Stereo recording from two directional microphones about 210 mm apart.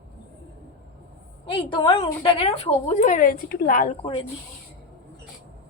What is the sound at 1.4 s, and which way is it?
A woman's voice, 25° left (ahead or behind).